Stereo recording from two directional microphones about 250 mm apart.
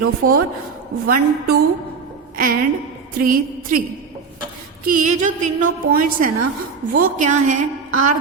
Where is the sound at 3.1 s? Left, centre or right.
Right.